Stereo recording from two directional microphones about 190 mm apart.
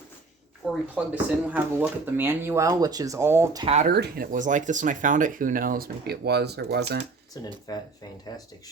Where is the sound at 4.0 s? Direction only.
50° right (ahead or behind).